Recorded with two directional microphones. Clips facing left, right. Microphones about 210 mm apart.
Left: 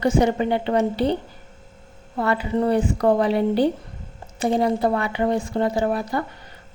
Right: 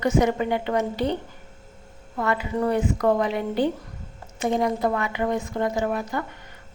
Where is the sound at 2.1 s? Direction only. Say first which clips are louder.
Left 3 dB; 30° left (ahead or behind).